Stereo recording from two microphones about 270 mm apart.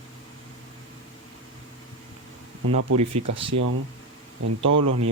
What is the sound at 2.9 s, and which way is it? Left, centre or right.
Speech, right.